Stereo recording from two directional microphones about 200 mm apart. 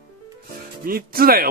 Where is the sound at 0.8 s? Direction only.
45° right (ahead or behind).